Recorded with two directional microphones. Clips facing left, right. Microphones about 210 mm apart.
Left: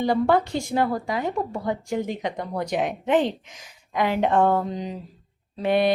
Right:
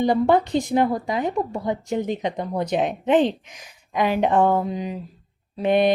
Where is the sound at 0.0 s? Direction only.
20° right (ahead or behind).